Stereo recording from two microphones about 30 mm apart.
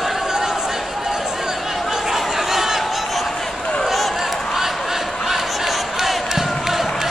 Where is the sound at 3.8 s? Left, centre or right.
Centre.